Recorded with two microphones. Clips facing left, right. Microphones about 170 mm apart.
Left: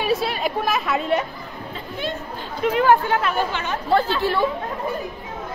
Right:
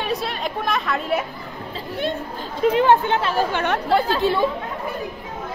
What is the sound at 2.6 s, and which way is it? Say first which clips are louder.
Speech: right 1 dB; 30° right (ahead or behind).